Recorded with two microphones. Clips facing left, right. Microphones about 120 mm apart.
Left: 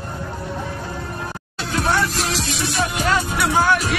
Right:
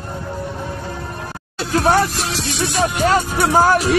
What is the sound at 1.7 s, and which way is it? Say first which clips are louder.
Music: right 6 dB; 40° right (ahead or behind).